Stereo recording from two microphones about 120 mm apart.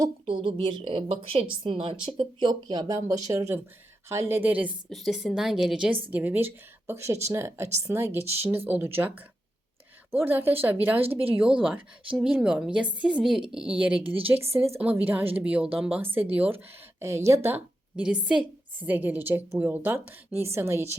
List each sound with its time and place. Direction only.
0.3 s a woman's voice: 45° right (ahead or behind); by 4.7 s 15° right (ahead or behind)
4.9 s a woman's voice: centre (ahead or behind)
6.1 s a woman's voice: 15° right (ahead or behind)
11.0 s a woman's voice: 55° right (ahead or behind)
11.3 s a woman's voice: 10° right (ahead or behind)
14.0 s a woman's voice: 50° right (ahead or behind)
14.8 s a woman's voice: 15° right (ahead or behind)
17.0 s a woman's voice: 25° right (ahead or behind)
18.0 s a woman's voice: 5° right (ahead or behind); by 20.9 s 20° right (ahead or behind)